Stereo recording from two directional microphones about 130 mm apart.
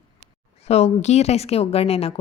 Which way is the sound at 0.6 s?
55° left (ahead or behind).